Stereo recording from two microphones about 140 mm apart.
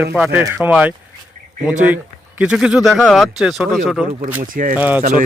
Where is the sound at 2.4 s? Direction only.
5° right (ahead or behind).